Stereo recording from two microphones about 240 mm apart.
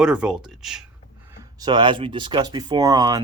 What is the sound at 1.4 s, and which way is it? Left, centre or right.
Speech, centre.